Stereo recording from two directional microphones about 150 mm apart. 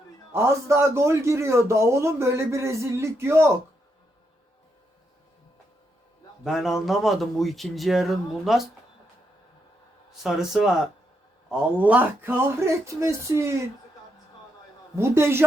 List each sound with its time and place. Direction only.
0.3 s a man's voice: 20° right (ahead or behind)
6.4 s speech: centre (ahead or behind)
10.1 s a man's voice: 5° right (ahead or behind); by 13.6 s 20° right (ahead or behind)
14.9 s a man's voice: 15° right (ahead or behind)